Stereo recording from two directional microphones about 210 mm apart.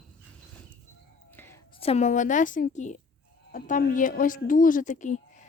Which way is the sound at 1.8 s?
30° left (ahead or behind).